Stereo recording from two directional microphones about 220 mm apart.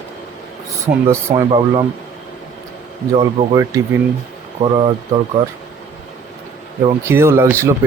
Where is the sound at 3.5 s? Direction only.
15° right (ahead or behind).